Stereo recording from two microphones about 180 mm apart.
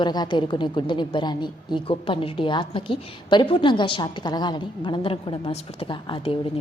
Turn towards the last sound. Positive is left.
turn(degrees=25)  # may be behind; listen again after turning